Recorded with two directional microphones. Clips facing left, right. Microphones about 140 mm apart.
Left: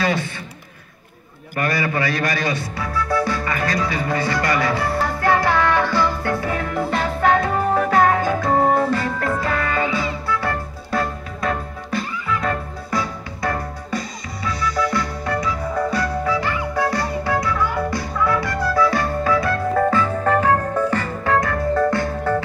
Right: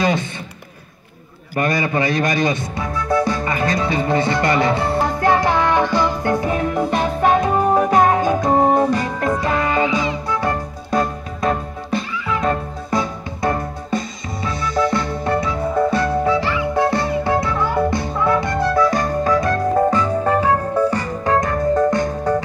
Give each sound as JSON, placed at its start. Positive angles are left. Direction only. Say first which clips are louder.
{"t": 0.0, "sound": "a sound", "louder": "right 2 dB", "side_deg": -20}
{"t": 1.6, "sound": "music", "louder": "right 3 dB", "side_deg": -20}
{"t": 19.2, "sound": "music", "louder": "right 2 dB", "side_deg": -40}
{"t": 19.7, "sound": "music", "louder": "right 1 dB", "side_deg": -20}